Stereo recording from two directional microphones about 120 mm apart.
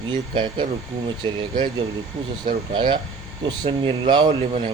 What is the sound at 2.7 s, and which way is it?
Speech, 40° right (ahead or behind).